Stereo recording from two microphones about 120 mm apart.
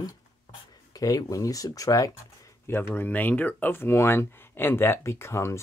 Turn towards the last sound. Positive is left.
turn(degrees=25)  # may be behind; listen again after turning